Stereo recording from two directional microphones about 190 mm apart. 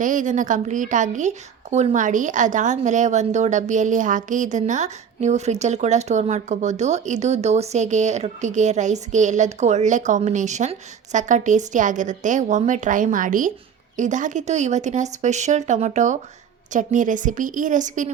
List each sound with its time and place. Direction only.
0.0 s a woman's voice: 40° right (ahead or behind)